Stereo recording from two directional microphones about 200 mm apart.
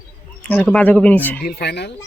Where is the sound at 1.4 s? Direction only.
50° left (ahead or behind).